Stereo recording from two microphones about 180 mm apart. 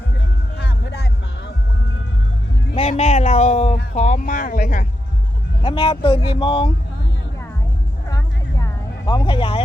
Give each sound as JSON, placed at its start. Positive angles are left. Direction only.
{"t": 0.5, "sound": "music", "side_deg": 65}
{"t": 2.7, "sound": "speech", "side_deg": 35}
{"t": 5.6, "sound": "speech", "side_deg": 30}
{"t": 8.1, "sound": "a sound", "side_deg": 20}